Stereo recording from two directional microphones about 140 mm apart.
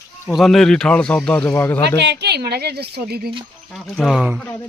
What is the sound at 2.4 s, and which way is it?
Speech, 90° right.